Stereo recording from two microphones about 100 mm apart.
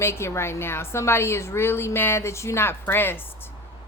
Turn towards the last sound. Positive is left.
turn(degrees=20)  # may be behind; listen again after turning